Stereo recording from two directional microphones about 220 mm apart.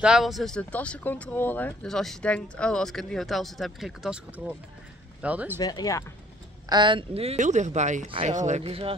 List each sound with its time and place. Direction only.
0.0 s speech: centre (ahead or behind)
5.6 s speech: 15° left (ahead or behind)
6.7 s speech: 20° right (ahead or behind)